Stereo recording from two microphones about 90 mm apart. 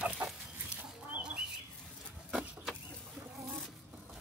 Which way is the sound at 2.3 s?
10° right (ahead or behind).